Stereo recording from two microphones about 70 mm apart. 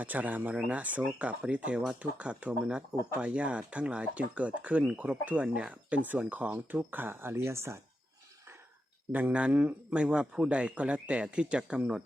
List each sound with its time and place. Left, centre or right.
0.0 s speech: right
9.3 s speech: centre